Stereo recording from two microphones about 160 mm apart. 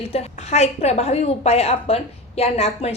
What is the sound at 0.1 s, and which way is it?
A woman's voice, 40° left (ahead or behind).